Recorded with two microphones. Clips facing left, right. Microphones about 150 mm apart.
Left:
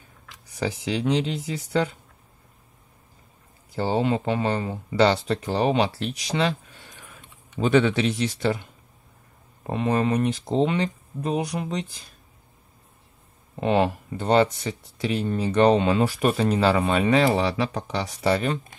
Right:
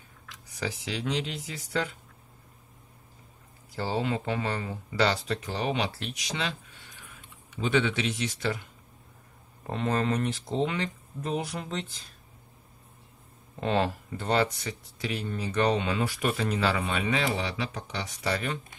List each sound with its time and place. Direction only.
0.6 s speech: 25° left (ahead or behind)
3.7 s speech: 20° left (ahead or behind)
7.7 s speech: 40° left (ahead or behind)
9.6 s speech: 15° left (ahead or behind)
13.6 s speech: 15° left (ahead or behind); by 18.6 s 30° left (ahead or behind)